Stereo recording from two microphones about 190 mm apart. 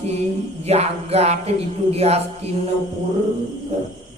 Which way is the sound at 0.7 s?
35° right (ahead or behind).